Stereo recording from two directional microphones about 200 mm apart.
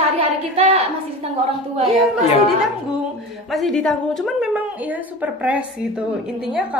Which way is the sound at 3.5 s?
Centre (ahead or behind).